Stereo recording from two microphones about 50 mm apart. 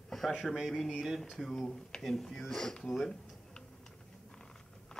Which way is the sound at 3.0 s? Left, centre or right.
Centre.